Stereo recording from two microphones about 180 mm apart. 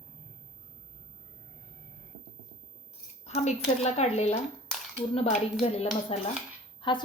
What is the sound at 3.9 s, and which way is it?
Speech, 35° left (ahead or behind).